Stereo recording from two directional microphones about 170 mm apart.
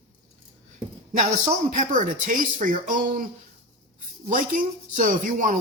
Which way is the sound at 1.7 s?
50° right (ahead or behind).